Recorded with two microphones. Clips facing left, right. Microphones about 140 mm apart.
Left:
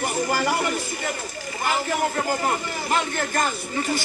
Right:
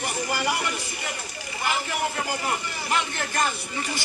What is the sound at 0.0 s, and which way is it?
A man's voice, 45° left (ahead or behind).